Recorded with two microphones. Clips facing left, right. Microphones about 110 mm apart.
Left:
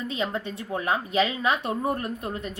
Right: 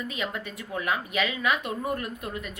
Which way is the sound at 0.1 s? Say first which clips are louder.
Left 4 dB; 30° left (ahead or behind).